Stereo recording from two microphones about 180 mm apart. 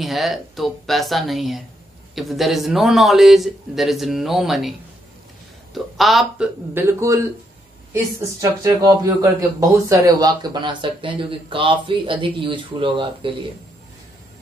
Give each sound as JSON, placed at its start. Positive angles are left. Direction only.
{"t": 0.0, "sound": "speech", "side_deg": 0}
{"t": 5.9, "sound": "speech", "side_deg": 0}